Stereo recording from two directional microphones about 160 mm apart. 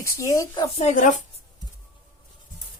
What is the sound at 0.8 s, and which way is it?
Speech, 50° left (ahead or behind).